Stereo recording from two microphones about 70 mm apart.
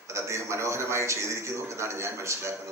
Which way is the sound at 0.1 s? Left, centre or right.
Right.